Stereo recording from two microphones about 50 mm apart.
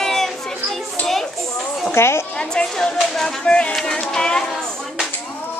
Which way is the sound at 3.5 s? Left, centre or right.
Left.